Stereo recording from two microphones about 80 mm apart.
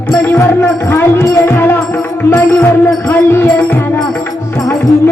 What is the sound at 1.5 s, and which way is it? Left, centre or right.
Music, left.